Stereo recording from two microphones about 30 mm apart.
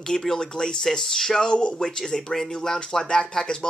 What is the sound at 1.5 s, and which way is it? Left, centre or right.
Speech, left.